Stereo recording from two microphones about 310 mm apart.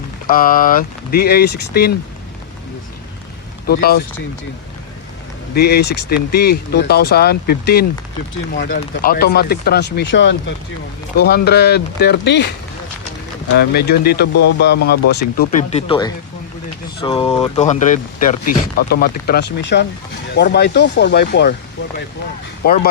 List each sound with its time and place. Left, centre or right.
0.3 s speech: left
3.7 s speech: left
5.5 s speech: left
13.7 s speech: left
15.9 s speech: centre; by 21.5 s left
22.6 s speech: left